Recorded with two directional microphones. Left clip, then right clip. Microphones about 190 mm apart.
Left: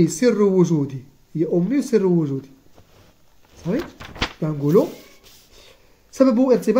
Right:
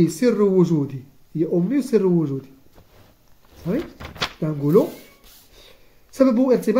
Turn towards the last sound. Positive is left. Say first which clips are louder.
# left 1 dB
turn(degrees=5)  # may be behind; listen again after turning